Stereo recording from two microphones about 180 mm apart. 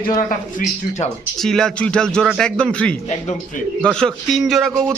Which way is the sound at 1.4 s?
5° left (ahead or behind).